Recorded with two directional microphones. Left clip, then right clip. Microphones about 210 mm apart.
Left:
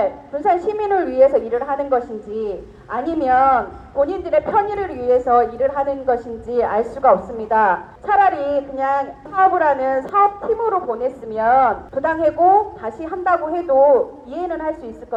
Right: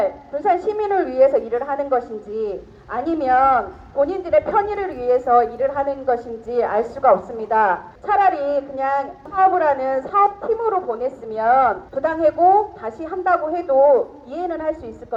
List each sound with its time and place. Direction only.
0.0 s a woman's voice: 20° right (ahead or behind)